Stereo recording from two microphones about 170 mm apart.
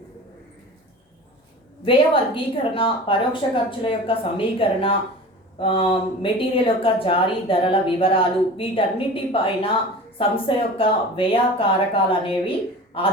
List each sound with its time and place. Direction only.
1.8 s a woman's voice: 30° left (ahead or behind)
12.9 s a woman's voice: 30° left (ahead or behind)